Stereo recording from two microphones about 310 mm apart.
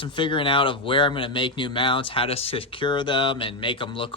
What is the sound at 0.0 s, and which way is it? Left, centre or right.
Speech, centre.